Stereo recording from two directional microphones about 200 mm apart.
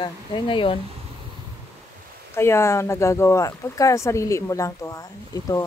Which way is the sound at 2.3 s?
10° left (ahead or behind).